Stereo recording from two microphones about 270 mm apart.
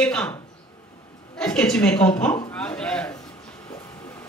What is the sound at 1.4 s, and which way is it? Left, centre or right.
Speech, centre.